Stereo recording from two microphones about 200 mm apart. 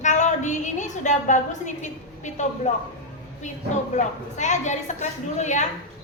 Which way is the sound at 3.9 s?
35° left (ahead or behind).